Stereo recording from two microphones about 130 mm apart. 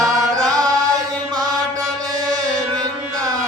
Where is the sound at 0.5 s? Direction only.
25° right (ahead or behind).